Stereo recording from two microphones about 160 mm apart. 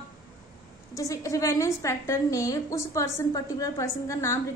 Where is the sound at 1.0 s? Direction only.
20° left (ahead or behind).